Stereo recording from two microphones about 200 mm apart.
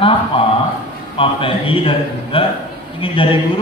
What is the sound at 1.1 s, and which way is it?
A man's voice, 25° left (ahead or behind).